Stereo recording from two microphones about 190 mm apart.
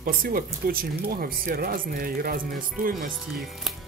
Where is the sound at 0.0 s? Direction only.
50° right (ahead or behind).